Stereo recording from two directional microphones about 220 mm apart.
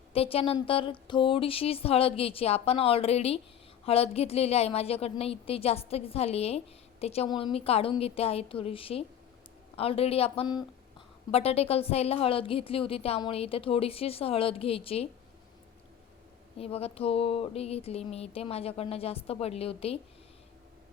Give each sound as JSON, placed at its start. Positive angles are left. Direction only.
{"t": 0.1, "sound": "a woman's voice", "side_deg": 25}
{"t": 16.6, "sound": "a woman's voice", "side_deg": 25}